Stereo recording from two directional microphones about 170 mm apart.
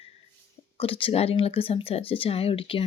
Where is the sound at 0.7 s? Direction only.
35° left (ahead or behind).